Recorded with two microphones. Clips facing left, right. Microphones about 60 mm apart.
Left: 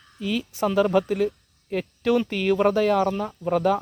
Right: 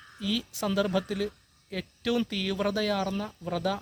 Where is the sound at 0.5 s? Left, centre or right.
Left.